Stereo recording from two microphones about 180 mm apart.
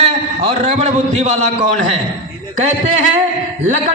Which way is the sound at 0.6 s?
40° right (ahead or behind).